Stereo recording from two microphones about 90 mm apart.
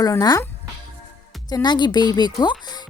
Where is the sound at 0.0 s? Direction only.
45° left (ahead or behind).